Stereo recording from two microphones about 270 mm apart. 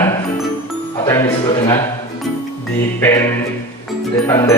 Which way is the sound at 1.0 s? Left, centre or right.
Centre.